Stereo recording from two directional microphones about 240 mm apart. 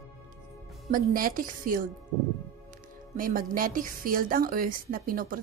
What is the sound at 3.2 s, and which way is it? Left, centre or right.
A woman's voice, right.